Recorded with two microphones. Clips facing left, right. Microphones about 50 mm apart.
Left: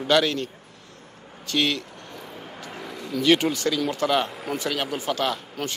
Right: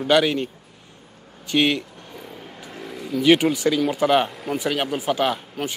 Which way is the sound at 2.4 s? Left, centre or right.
Centre.